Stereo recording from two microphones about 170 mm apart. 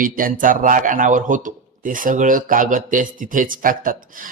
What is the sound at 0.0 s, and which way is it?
Speech, 55° right (ahead or behind).